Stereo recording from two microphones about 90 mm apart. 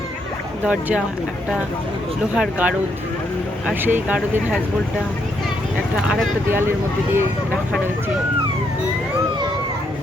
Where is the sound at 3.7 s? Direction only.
20° right (ahead or behind).